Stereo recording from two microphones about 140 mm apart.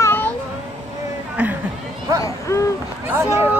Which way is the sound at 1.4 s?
10° right (ahead or behind).